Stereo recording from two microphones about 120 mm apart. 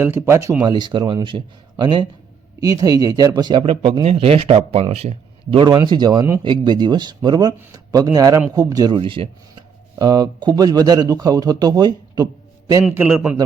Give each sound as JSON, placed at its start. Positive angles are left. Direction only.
{"t": 0.0, "sound": "speech", "side_deg": -20}
{"t": 0.6, "sound": "speech", "side_deg": -35}
{"t": 3.7, "sound": "speech", "side_deg": -50}
{"t": 5.6, "sound": "speech", "side_deg": -35}
{"t": 9.0, "sound": "speech", "side_deg": -45}